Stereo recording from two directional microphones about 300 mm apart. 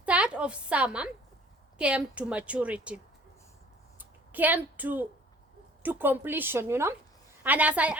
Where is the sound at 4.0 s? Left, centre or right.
Centre.